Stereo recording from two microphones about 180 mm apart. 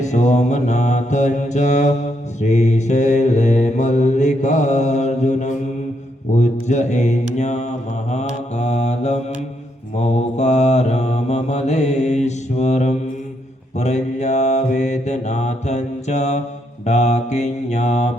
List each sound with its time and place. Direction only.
0.0 s mantra: 40° left (ahead or behind)